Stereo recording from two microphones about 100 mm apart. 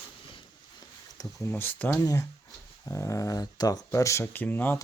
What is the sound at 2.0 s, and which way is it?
Speech, 35° left (ahead or behind).